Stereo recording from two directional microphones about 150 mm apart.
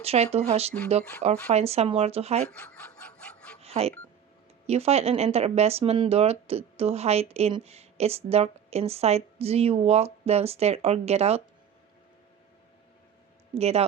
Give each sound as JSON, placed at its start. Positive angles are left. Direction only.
{"t": 0.0, "sound": "speech", "side_deg": -40}
{"t": 2.4, "sound": "chicken", "side_deg": 5}
{"t": 3.6, "sound": "a sound", "side_deg": -45}
{"t": 4.6, "sound": "speech", "side_deg": -45}
{"t": 13.5, "sound": "speech", "side_deg": -45}